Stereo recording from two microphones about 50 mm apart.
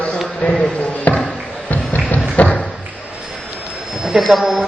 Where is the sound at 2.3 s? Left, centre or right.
Left.